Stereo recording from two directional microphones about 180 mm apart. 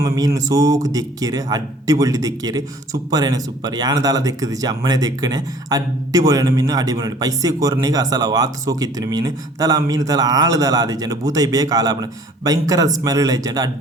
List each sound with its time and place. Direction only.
0.0 s speech: 20° right (ahead or behind)